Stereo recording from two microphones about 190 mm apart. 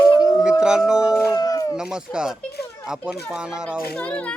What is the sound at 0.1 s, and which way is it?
Howl, 20° left (ahead or behind).